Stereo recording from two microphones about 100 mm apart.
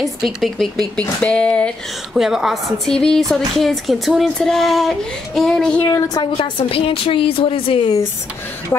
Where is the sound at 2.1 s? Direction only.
5° right (ahead or behind).